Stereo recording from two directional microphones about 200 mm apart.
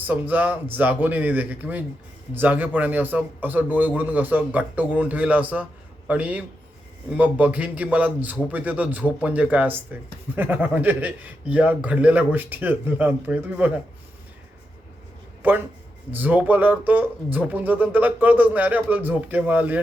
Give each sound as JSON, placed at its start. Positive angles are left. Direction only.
{"t": 0.1, "sound": "speech", "side_deg": -10}
{"t": 15.4, "sound": "a man's voice", "side_deg": -10}